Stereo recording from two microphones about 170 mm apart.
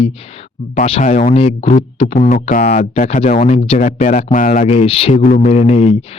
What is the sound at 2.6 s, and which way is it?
Speech, 40° left (ahead or behind).